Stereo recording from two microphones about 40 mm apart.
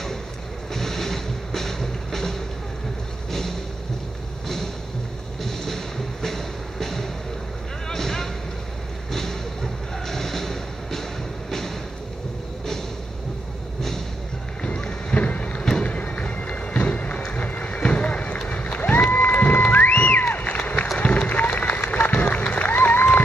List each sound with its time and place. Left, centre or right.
0.7 s music: centre
5.4 s a sound: centre
14.6 s boat: left
15.8 s music: left
17.3 s run: left
18.5 s crowd: left
19.0 s music: left
20.3 s a sound: left
21.0 s run: left
21.9 s music: left
22.5 s applause: left
22.8 s applause: left